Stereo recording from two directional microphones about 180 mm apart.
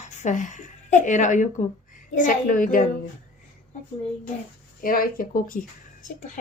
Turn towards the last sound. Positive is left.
turn(degrees=45)  # may be behind; listen again after turning